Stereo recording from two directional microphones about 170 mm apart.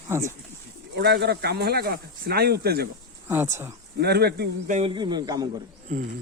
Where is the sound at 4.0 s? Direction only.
70° right (ahead or behind).